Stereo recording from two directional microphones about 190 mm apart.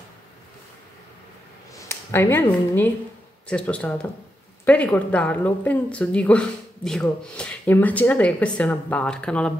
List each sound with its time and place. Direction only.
1.8 s a woman's voice: 15° left (ahead or behind)